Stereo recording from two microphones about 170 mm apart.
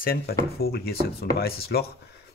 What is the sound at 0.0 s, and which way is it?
Speech, 60° left (ahead or behind).